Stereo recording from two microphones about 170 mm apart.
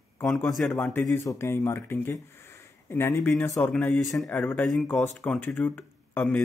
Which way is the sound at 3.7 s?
5° left (ahead or behind).